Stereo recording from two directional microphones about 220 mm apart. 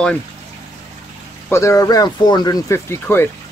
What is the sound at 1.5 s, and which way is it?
Speech, 15° left (ahead or behind).